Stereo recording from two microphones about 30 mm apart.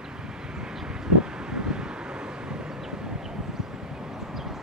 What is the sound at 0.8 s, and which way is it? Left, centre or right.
Vehicle, right.